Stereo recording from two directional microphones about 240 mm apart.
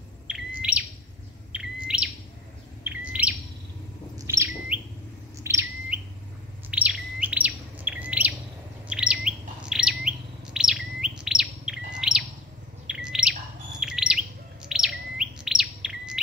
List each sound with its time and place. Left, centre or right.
0.3 s chirp: centre
2.8 s bird: centre
5.4 s chirp: centre
6.7 s bird: centre
8.8 s chirp: centre
12.8 s bird: centre
13.7 s chirp: centre